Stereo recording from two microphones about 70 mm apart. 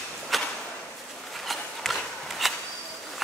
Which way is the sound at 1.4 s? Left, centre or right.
Centre.